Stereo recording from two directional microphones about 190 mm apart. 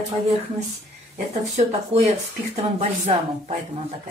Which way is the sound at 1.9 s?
30° right (ahead or behind).